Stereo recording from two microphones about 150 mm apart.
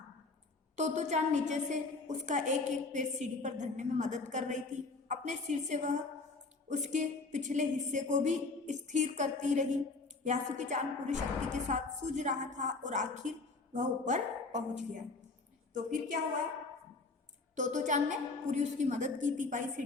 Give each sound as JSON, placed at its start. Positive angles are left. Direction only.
{"t": 0.8, "sound": "a woman's voice", "side_deg": -50}
{"t": 17.5, "sound": "a woman's voice", "side_deg": -55}